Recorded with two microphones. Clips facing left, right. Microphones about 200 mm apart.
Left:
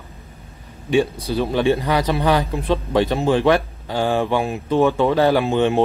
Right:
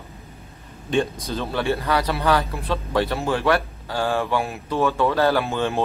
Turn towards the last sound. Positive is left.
turn(degrees=20)  # may be behind; listen again after turning